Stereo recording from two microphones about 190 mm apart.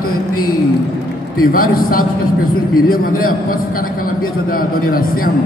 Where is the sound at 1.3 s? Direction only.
50° left (ahead or behind).